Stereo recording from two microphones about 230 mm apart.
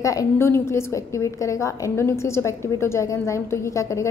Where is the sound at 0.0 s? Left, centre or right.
Centre.